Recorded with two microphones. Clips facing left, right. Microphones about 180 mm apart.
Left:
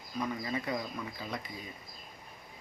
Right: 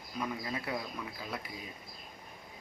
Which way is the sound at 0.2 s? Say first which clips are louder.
Left 2 dB; 5° right (ahead or behind).